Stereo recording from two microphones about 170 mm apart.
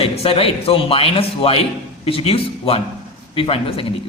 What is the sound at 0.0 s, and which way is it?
Speech, 35° left (ahead or behind).